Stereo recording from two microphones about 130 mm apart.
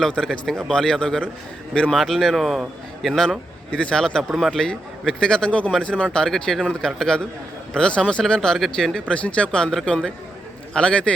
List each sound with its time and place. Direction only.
0.0 s a man's voice: 5° left (ahead or behind)